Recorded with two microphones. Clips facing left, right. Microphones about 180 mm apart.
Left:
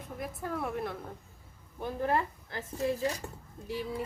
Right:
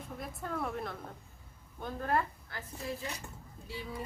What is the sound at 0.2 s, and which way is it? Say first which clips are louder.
Speech: left 3 dB; 5° left (ahead or behind).